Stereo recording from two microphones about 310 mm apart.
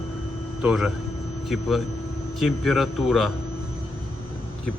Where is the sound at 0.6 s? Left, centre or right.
Centre.